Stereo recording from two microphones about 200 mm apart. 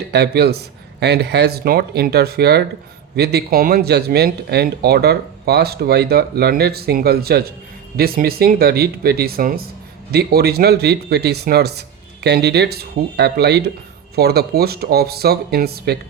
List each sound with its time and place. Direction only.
0.1 s speech: 55° right (ahead or behind)